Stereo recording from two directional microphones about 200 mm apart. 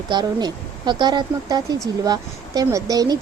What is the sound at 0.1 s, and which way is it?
A woman's voice, 20° right (ahead or behind).